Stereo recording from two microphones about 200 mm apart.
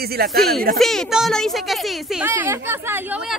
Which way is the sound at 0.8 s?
Centre (ahead or behind).